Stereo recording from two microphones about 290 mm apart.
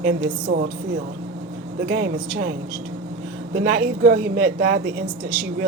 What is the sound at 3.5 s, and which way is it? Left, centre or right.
Speech, right.